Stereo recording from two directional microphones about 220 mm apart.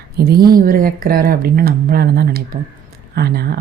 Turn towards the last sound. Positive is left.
turn(degrees=-45)  # may be behind; listen again after turning